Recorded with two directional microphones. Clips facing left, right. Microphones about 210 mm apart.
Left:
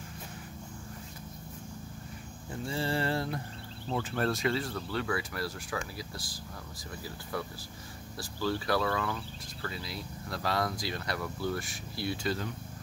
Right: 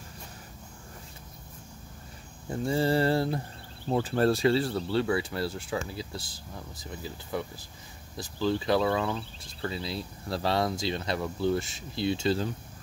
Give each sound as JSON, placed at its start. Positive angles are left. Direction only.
{"t": 2.6, "sound": "mantra", "side_deg": -40}
{"t": 3.9, "sound": "speech", "side_deg": -35}